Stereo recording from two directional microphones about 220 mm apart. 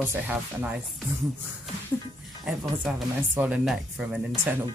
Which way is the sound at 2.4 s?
Centre (ahead or behind).